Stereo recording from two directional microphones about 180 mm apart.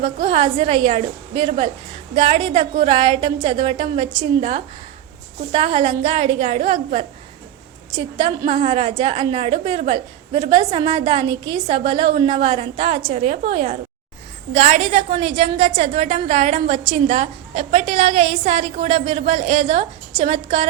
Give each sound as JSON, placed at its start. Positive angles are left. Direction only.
{"t": 0.0, "sound": "a woman's voice", "side_deg": -30}